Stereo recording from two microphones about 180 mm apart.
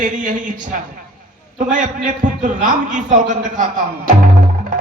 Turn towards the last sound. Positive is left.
turn(degrees=-45)  # may be behind; listen again after turning